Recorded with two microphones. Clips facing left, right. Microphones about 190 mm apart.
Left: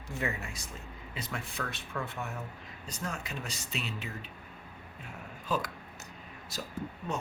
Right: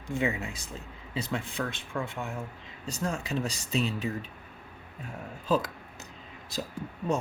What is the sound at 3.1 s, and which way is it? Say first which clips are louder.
Speech: right 9 dB; 35° right (ahead or behind).